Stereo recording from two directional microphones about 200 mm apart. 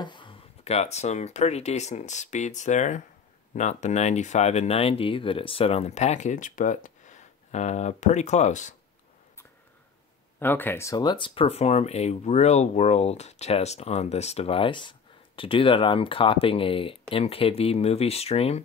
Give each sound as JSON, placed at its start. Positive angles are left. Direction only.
{"t": 0.0, "sound": "speech", "side_deg": 25}
{"t": 10.4, "sound": "speech", "side_deg": 10}